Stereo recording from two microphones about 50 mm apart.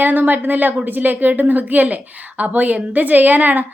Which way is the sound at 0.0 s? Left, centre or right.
Right.